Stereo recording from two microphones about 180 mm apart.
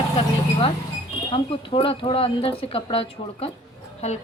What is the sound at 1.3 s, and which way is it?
Speech, 30° left (ahead or behind).